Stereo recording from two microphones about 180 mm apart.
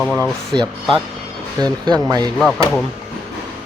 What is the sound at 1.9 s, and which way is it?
Speech, 20° right (ahead or behind).